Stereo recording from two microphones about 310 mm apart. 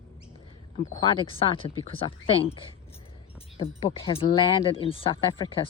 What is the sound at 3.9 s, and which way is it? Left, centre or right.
Speech, centre.